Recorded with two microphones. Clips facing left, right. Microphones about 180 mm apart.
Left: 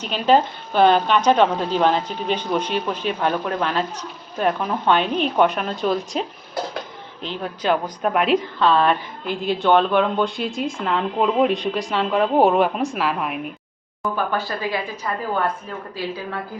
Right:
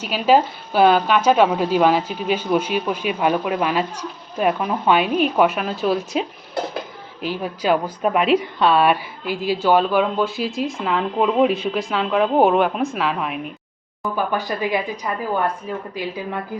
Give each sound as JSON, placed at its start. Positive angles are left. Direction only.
{"t": 0.0, "sound": "speech", "side_deg": -5}
{"t": 14.2, "sound": "speech", "side_deg": -15}